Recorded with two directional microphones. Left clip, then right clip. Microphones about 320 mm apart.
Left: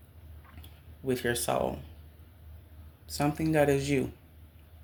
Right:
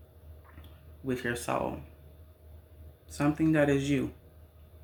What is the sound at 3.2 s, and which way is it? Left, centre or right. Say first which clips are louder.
Speech: even; left.